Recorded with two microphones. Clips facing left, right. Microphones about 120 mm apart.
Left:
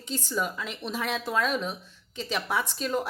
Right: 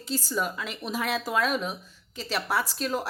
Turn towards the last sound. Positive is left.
turn(degrees=-5)  # may be behind; listen again after turning